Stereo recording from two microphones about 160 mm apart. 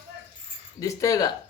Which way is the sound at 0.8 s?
20° left (ahead or behind).